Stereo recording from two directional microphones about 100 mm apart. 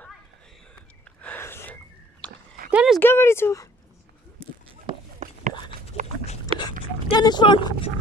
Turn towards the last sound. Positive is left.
turn(degrees=55)  # may be behind; listen again after turning